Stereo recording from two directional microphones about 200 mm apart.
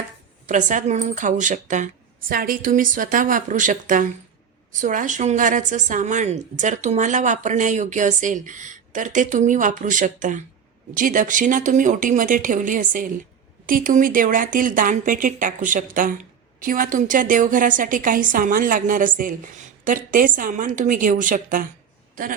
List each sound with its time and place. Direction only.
0.4 s a woman's voice: 40° right (ahead or behind)